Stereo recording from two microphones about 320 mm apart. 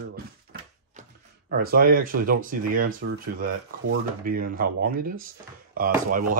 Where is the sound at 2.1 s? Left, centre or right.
Right.